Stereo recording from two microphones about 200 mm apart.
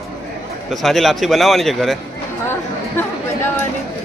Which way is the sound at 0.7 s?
Centre (ahead or behind).